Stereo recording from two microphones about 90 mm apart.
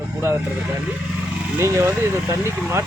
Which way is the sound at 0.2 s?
25° right (ahead or behind).